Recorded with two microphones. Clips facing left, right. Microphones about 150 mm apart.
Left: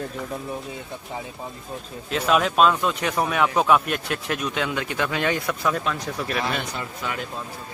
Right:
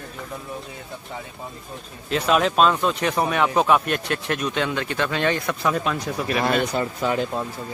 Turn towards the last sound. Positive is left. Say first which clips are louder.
# right 8 dB
turn(degrees=-35)  # may be behind; listen again after turning